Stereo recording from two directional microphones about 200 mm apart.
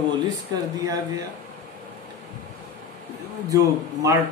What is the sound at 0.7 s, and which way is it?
Speech, 20° right (ahead or behind).